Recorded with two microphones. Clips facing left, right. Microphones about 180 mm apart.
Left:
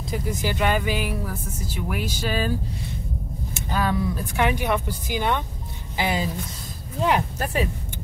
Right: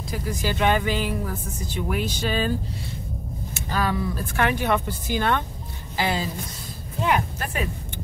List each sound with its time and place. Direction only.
0.1 s speech: 20° left (ahead or behind)
0.6 s speech: 10° left (ahead or behind)
3.5 s speech: 20° left (ahead or behind)
7.1 s speech: 30° left (ahead or behind)